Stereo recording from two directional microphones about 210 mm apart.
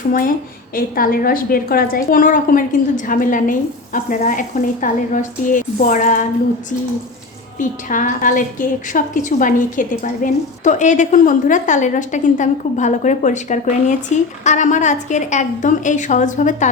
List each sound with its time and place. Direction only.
0.1 s a woman's voice: 40° left (ahead or behind)
7.6 s a woman's voice: 40° left (ahead or behind)